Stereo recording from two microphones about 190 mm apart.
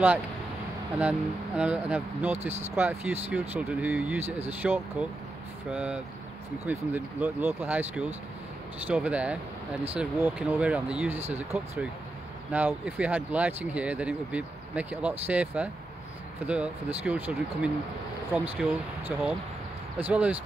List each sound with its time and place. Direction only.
0.9 s speech: 5° right (ahead or behind)
2.3 s speech: 35° right (ahead or behind)
2.7 s speech: 15° right (ahead or behind)